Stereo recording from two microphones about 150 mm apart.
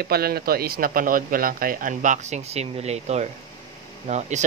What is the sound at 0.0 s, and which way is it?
Speech, 90° right.